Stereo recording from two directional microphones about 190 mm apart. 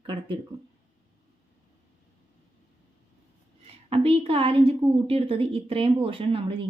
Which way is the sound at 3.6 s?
30° right (ahead or behind).